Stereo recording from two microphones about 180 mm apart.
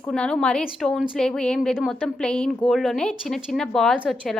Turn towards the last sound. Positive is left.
turn(degrees=-5)  # may be behind; listen again after turning